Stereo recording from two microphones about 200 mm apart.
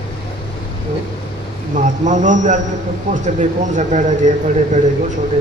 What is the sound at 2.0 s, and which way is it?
A man's voice, 40° right (ahead or behind).